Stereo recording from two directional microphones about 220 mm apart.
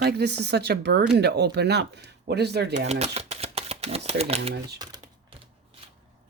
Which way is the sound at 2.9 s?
30° right (ahead or behind).